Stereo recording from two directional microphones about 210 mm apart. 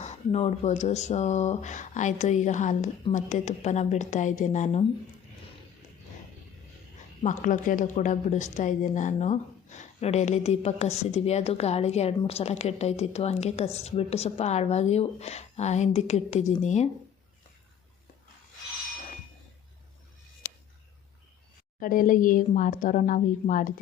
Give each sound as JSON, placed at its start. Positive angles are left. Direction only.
{"t": 0.0, "sound": "a woman's voice", "side_deg": 30}
{"t": 7.2, "sound": "a woman's voice", "side_deg": 35}
{"t": 21.8, "sound": "a woman's voice", "side_deg": 40}